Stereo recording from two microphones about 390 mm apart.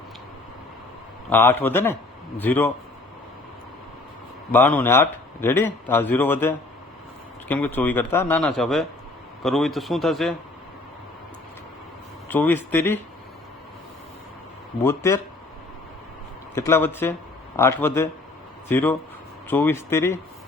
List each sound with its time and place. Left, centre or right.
1.3 s a man's voice: centre
4.5 s a man's voice: centre
12.3 s a man's voice: centre
14.8 s speech: centre
16.6 s a man's voice: centre